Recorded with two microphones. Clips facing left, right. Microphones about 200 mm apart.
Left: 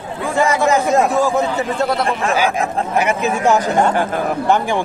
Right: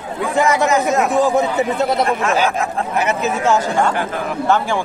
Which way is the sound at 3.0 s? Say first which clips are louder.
Left 1 dB; 15° left (ahead or behind).